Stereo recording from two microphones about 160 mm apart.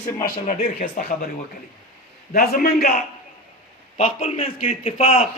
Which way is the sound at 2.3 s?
70° left (ahead or behind).